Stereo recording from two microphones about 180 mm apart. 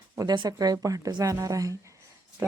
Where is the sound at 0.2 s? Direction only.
20° right (ahead or behind).